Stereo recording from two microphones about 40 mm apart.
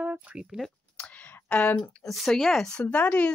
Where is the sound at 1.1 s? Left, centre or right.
Left.